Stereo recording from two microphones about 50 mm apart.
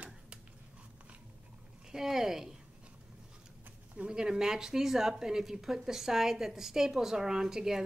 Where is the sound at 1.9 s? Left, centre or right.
Centre.